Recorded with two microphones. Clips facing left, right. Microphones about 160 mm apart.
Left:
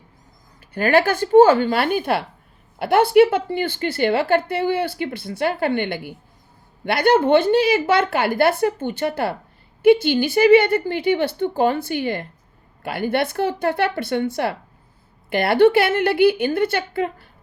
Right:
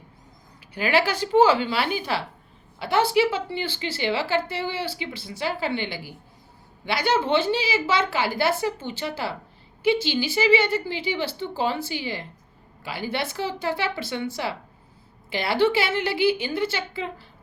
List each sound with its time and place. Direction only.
0.7 s a woman's voice: 50° left (ahead or behind)